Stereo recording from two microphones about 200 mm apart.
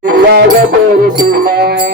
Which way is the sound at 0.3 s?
55° right (ahead or behind).